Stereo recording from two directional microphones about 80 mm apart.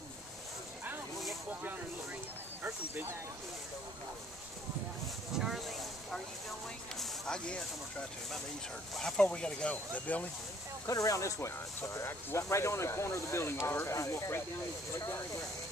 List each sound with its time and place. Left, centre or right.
2.6 s snake: right
5.4 s vehicle: centre
7.0 s a sound: centre
8.9 s speech: centre
10.9 s speech: left